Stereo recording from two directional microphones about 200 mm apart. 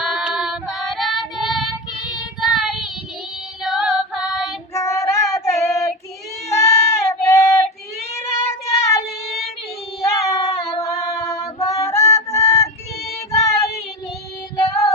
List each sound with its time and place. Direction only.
0.0 s child singing: centre (ahead or behind)
3.6 s female singing: 5° right (ahead or behind)
4.7 s child singing: 15° left (ahead or behind)
11.7 s a sound: 15° left (ahead or behind)
14.6 s female singing: 15° left (ahead or behind)